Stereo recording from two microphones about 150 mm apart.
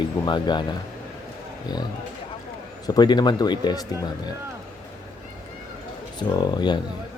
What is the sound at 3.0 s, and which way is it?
Speech, 30° left (ahead or behind).